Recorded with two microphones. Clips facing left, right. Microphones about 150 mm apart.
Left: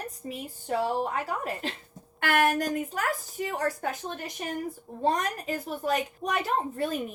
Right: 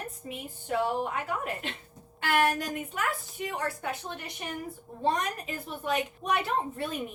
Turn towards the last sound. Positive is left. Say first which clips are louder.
# left 3 dB
turn(degrees=40)  # may be behind; listen again after turning